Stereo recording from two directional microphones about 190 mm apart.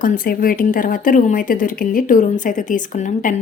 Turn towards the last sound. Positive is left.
turn(degrees=40)  # may be behind; listen again after turning